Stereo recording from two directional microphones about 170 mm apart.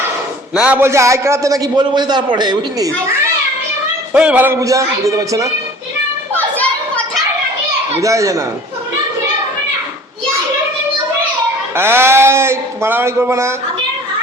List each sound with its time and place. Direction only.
0.5 s a man's voice: 10° right (ahead or behind); by 2.9 s 25° right (ahead or behind)
4.1 s a man's voice: 5° right (ahead or behind)
6.3 s children playing: 10° left (ahead or behind)
7.9 s a man's voice: 20° right (ahead or behind)
11.7 s a man's voice: 15° right (ahead or behind)